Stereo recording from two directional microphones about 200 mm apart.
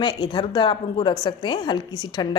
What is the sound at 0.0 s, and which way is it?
Speech, 20° left (ahead or behind).